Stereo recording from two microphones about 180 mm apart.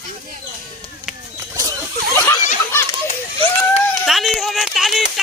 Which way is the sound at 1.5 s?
20° right (ahead or behind).